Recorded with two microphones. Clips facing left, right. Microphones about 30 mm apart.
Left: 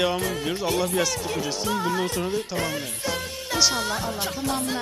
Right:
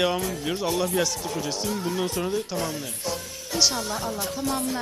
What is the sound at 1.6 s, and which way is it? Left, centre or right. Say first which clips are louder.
Music: left 3 dB; left.